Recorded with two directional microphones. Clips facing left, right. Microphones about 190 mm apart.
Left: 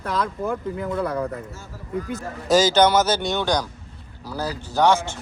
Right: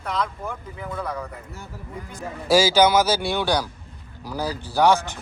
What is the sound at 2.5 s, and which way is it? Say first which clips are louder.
A man's voice: even; 10° right (ahead or behind).